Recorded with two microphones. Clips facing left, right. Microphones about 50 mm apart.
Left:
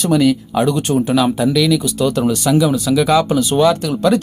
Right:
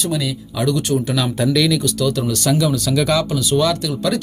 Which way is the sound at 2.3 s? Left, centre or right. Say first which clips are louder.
Left 3 dB; centre.